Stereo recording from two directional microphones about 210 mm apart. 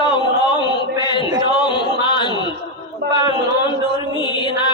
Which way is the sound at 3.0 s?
50° right (ahead or behind).